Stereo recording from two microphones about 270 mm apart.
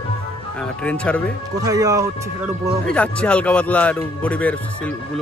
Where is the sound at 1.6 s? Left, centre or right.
Centre.